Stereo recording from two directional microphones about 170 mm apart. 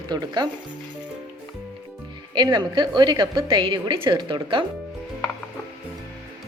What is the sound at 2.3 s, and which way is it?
A woman's voice, 25° right (ahead or behind).